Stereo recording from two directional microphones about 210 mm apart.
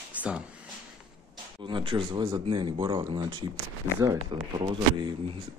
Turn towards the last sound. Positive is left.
turn(degrees=-20)  # may be behind; listen again after turning